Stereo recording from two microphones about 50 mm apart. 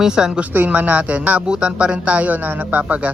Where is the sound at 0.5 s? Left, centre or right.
Right.